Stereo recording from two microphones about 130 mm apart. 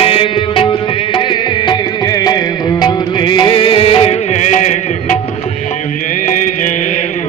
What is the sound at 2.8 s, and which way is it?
Music, 35° left (ahead or behind).